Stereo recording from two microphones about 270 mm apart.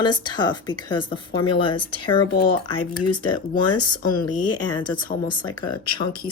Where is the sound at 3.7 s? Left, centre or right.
Centre.